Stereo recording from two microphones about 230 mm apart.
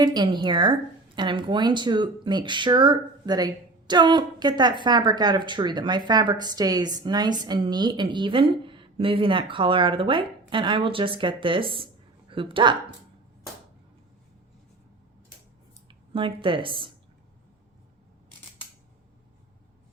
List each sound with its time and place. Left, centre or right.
0.0 s a woman's voice: centre
15.9 s speech: right